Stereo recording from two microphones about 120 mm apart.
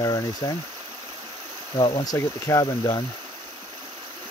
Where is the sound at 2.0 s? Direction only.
25° left (ahead or behind).